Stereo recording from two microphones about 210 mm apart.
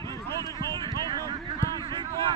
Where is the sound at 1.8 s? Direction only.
25° right (ahead or behind).